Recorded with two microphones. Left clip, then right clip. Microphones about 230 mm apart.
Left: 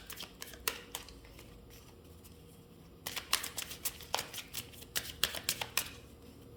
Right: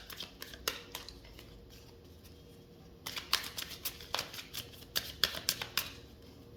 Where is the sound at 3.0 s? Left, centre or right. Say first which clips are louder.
Right 1 dB; centre.